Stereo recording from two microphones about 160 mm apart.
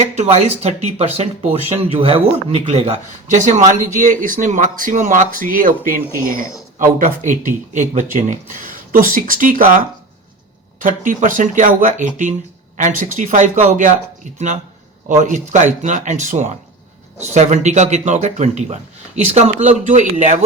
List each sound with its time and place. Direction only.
0.0 s speech: 45° right (ahead or behind)
3.4 s speech: 50° right (ahead or behind)